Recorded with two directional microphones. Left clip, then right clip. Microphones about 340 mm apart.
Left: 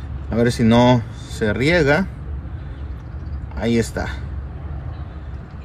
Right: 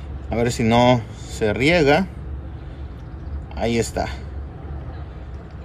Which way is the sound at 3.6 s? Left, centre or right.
Centre.